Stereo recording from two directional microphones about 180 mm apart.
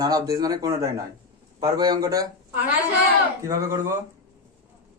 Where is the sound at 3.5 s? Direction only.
15° right (ahead or behind).